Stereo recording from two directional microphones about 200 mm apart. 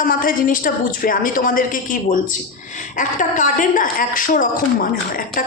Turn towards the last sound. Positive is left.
turn(degrees=45)  # may be behind; listen again after turning